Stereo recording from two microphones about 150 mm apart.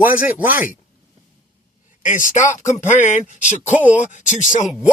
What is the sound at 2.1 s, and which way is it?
Speech, 55° left (ahead or behind).